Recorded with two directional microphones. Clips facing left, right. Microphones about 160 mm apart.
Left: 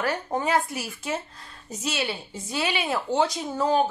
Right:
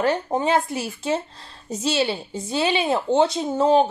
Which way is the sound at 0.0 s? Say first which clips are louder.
Right 5 dB; 25° right (ahead or behind).